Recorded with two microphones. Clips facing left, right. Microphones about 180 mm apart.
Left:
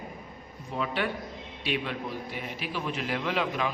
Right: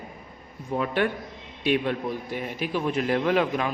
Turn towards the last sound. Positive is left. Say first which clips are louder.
# right 6 dB
turn(degrees=-50)  # may be behind; listen again after turning